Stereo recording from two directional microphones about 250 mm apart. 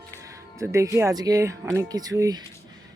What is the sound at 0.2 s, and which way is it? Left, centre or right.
Speech, centre.